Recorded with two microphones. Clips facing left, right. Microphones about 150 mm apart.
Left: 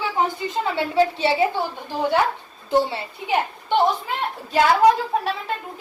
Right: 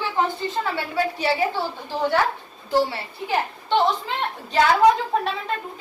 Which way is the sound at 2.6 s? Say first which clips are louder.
Left 1 dB; 20° left (ahead or behind).